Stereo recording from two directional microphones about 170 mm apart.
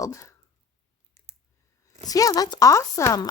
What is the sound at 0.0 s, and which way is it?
Speech, 20° left (ahead or behind).